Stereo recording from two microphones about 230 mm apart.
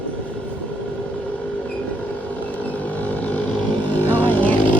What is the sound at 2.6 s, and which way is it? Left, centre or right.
Vehicle, centre.